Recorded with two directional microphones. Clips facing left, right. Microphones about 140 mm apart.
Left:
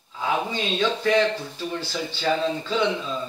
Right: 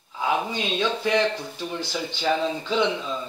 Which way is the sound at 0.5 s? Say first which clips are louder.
Left 1 dB; 15° right (ahead or behind).